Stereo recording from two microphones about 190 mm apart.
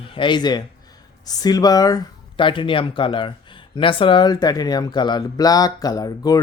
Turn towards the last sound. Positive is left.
turn(degrees=20)  # may be behind; listen again after turning